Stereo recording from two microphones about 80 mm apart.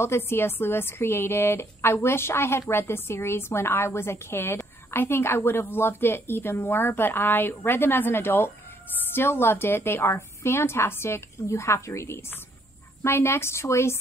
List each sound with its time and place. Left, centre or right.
0.0 s a woman's voice: left